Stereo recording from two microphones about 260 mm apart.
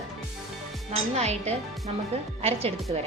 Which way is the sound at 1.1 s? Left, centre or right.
Right.